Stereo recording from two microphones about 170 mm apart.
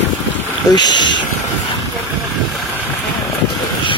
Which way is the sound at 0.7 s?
25° left (ahead or behind).